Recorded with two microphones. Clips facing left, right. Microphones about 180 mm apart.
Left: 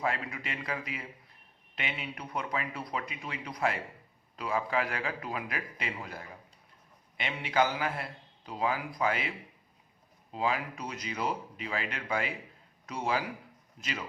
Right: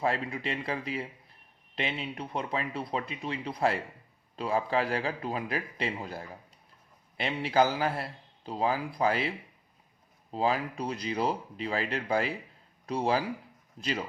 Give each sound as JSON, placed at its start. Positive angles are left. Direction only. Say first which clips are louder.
{"t": 0.0, "sound": "a man's voice", "louder": "right 4 dB", "side_deg": -30}
{"t": 10.3, "sound": "a man's voice", "louder": "right 3 dB", "side_deg": -35}